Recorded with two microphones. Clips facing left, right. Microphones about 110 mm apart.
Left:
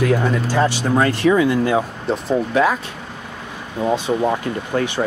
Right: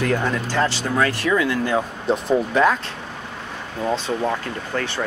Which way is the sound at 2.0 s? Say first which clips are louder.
Even; centre (ahead or behind).